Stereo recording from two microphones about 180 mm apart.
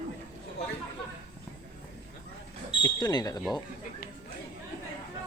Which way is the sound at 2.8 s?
20° left (ahead or behind).